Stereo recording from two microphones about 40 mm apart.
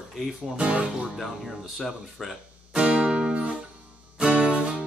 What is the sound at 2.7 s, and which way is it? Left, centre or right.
Music, right.